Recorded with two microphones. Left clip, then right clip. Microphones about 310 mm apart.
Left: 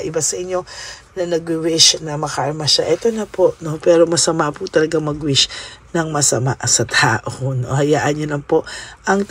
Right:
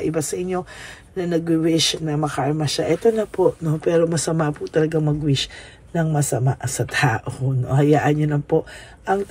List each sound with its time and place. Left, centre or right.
0.0 s speech: centre